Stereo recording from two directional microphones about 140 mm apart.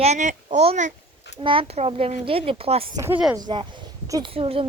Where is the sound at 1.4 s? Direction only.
40° right (ahead or behind).